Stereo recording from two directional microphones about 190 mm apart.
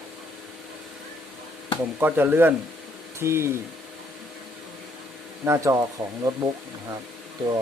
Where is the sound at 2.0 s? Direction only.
10° right (ahead or behind).